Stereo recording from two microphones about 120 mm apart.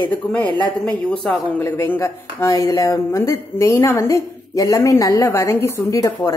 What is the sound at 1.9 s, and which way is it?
Speech, 25° left (ahead or behind).